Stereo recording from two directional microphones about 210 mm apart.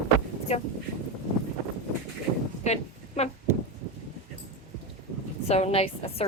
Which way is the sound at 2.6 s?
30° left (ahead or behind).